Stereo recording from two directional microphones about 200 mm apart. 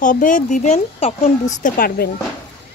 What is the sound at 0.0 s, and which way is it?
Speech, 40° left (ahead or behind).